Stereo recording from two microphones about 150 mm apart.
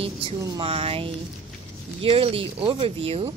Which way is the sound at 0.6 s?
40° right (ahead or behind).